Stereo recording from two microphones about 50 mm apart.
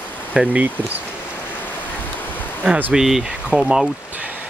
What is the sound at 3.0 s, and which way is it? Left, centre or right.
Speech, centre.